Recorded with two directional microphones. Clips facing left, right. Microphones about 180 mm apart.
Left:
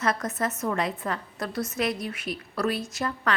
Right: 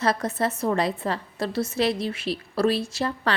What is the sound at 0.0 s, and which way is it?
A woman's voice, 30° right (ahead or behind).